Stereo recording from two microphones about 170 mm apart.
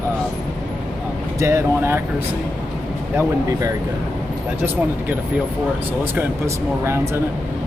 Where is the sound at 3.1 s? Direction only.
20° right (ahead or behind).